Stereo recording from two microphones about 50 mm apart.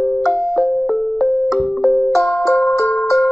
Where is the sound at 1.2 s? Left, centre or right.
Centre.